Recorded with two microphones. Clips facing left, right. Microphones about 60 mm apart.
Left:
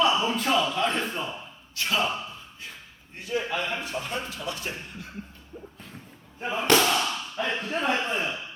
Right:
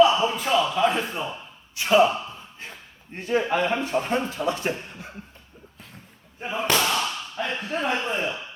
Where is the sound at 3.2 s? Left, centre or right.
Right.